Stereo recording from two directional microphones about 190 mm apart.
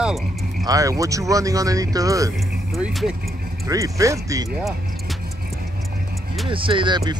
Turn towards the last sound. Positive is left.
turn(degrees=-20)  # may be behind; listen again after turning